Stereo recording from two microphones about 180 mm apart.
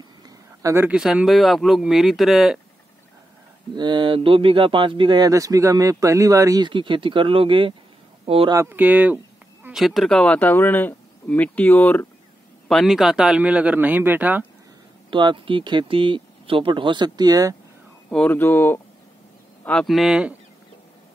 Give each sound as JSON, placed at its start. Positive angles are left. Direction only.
{"t": 0.2, "sound": "speech", "side_deg": -20}
{"t": 3.7, "sound": "speech", "side_deg": -25}
{"t": 8.5, "sound": "speech", "side_deg": -10}
{"t": 12.6, "sound": "speech", "side_deg": 0}
{"t": 15.0, "sound": "speech", "side_deg": -25}
{"t": 18.1, "sound": "speech", "side_deg": 10}